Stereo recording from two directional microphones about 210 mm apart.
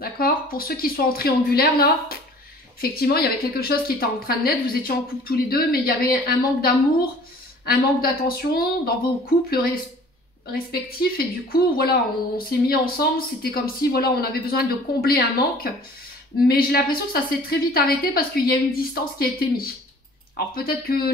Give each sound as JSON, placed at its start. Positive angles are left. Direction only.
{"t": 0.0, "sound": "a woman's voice", "side_deg": 45}